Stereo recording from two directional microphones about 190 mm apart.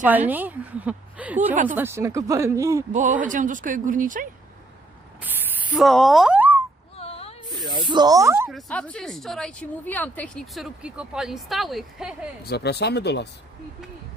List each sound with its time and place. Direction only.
0.0 s a woman's voice: 10° right (ahead or behind)
2.9 s speech: 45° right (ahead or behind)
5.2 s speech: 5° right (ahead or behind)
6.9 s a sound: 30° left (ahead or behind)
7.6 s speech: 25° right (ahead or behind)
8.4 s speech: 5° left (ahead or behind)
12.4 s speech: 60° left (ahead or behind)